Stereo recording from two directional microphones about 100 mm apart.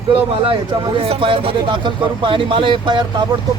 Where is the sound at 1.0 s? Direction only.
65° right (ahead or behind).